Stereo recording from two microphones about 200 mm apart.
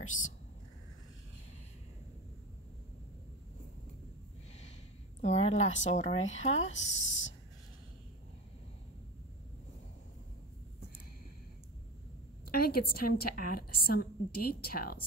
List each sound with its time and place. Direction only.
5.2 s a woman's voice: 35° left (ahead or behind)
6.9 s a sound: 65° left (ahead or behind)
12.4 s a woman's voice: 50° left (ahead or behind)